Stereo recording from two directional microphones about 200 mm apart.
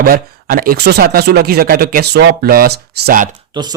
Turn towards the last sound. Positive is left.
turn(degrees=-25)  # may be behind; listen again after turning